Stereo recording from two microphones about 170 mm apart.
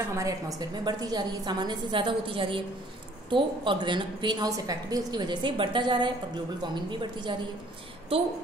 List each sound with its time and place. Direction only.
0.1 s a woman's voice: 20° right (ahead or behind)